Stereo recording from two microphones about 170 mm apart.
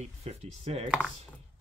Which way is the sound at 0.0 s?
35° right (ahead or behind).